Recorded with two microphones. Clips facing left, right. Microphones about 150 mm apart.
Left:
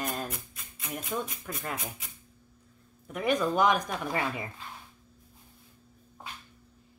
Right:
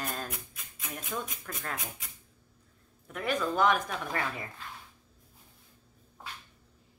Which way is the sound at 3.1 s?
15° left (ahead or behind).